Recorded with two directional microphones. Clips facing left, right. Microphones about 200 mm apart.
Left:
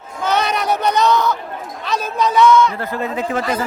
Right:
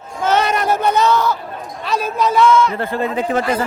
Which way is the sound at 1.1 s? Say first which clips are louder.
Even; 20° left (ahead or behind).